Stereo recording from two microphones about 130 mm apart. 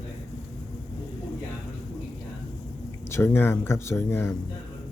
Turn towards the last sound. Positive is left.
turn(degrees=20)  # may be behind; listen again after turning